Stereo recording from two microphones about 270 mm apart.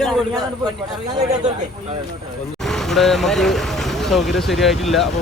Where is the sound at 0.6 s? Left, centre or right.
Centre.